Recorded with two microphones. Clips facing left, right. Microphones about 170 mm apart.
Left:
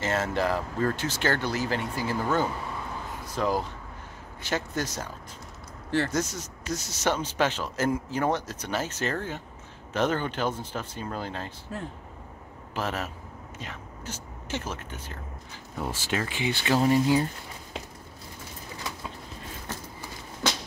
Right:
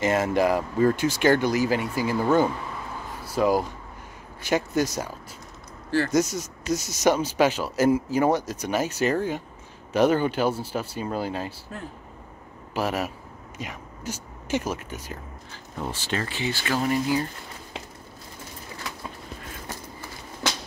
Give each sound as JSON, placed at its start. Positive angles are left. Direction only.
{"t": 0.0, "sound": "speech", "side_deg": -15}
{"t": 6.1, "sound": "speech", "side_deg": -10}
{"t": 12.7, "sound": "speech", "side_deg": -10}
{"t": 15.5, "sound": "speech", "side_deg": 10}